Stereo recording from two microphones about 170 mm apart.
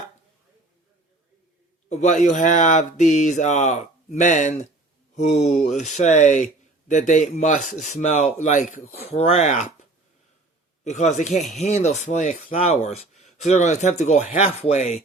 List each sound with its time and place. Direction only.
1.9 s a man's voice: 45° left (ahead or behind)
5.1 s a sound: 40° left (ahead or behind)
5.6 s speech: 40° left (ahead or behind)
10.8 s speech: 45° left (ahead or behind)